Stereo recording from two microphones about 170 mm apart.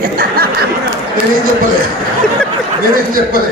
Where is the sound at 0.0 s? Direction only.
60° right (ahead or behind).